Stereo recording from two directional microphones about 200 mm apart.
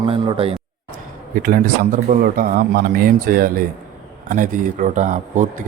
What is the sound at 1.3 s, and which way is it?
A man's voice, 45° right (ahead or behind).